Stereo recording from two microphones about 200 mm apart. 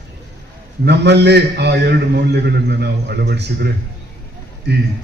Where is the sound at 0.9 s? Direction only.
55° right (ahead or behind).